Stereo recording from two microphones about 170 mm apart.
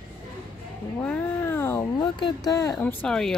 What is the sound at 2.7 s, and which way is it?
Speech, 5° left (ahead or behind).